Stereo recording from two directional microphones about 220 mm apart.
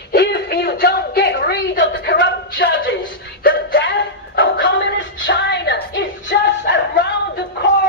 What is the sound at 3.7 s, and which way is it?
Music, 50° left (ahead or behind).